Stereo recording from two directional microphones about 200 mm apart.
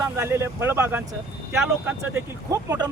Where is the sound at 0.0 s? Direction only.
15° right (ahead or behind).